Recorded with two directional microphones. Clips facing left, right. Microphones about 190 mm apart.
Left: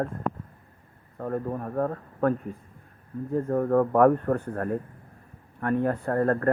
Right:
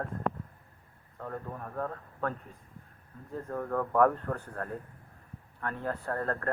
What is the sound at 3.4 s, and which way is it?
Speech, 35° left (ahead or behind).